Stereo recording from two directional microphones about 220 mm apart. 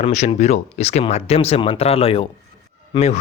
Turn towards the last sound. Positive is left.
turn(degrees=30)  # may be behind; listen again after turning